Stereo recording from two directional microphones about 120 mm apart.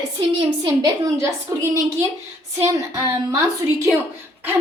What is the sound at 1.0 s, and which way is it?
A woman's voice, 25° right (ahead or behind).